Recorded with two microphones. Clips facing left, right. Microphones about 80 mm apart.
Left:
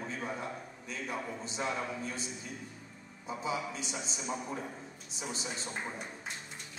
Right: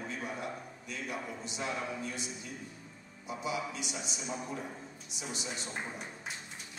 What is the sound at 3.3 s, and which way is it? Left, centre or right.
A man's voice, left.